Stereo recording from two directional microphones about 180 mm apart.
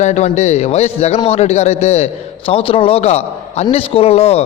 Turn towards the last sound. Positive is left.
turn(degrees=35)  # may be behind; listen again after turning